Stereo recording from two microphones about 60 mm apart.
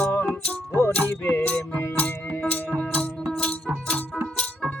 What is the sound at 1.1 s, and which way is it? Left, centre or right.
Music, left.